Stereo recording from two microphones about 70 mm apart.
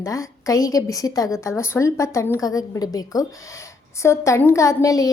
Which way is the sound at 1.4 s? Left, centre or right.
Left.